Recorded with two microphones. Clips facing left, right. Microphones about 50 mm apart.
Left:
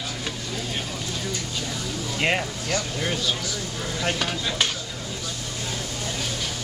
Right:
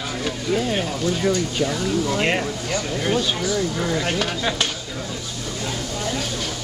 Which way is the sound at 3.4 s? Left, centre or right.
Right.